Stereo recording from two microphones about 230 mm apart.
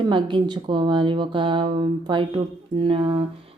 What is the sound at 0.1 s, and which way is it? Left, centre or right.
Speech, right.